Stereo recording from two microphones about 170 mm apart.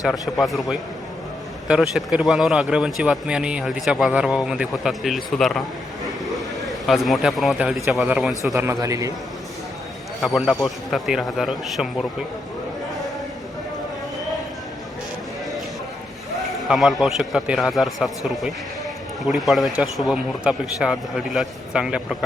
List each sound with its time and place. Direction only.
0.0 s speech: centre (ahead or behind)
6.2 s a sound: centre (ahead or behind)
7.9 s speech: 5° right (ahead or behind)
8.5 s speech: 15° right (ahead or behind)
10.2 s speech: centre (ahead or behind)
16.5 s speech: centre (ahead or behind)